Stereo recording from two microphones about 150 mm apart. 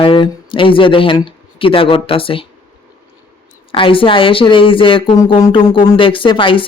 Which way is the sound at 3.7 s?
35° left (ahead or behind).